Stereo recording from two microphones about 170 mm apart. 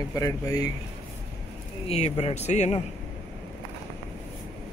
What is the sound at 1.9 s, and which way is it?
Speech, 35° left (ahead or behind).